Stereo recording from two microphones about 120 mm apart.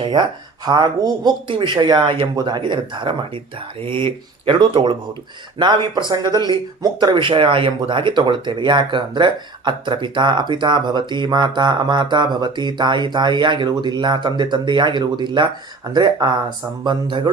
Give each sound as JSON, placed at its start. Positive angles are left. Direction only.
{"t": 0.1, "sound": "speech", "side_deg": -35}
{"t": 2.3, "sound": "speech", "side_deg": -35}